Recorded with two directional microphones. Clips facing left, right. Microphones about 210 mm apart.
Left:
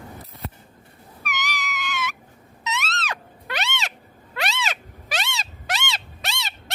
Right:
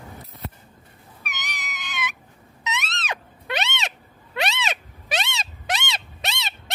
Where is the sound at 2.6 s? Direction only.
20° right (ahead or behind).